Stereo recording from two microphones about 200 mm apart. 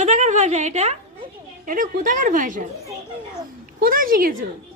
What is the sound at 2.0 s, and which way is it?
Speech, 40° right (ahead or behind).